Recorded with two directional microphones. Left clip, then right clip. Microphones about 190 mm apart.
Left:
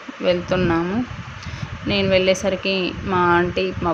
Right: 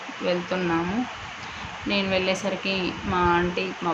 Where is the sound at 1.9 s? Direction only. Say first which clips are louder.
Left 7 dB; 35° left (ahead or behind).